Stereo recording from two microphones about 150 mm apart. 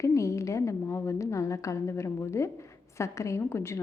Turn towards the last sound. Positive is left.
turn(degrees=15)  # may be behind; listen again after turning